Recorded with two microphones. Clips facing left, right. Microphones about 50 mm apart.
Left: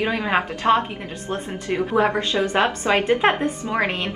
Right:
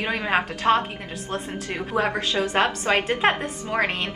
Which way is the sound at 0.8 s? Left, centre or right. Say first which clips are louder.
Left 2 dB; left.